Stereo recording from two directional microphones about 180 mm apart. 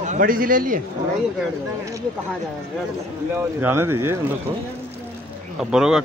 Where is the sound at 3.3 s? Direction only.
15° right (ahead or behind).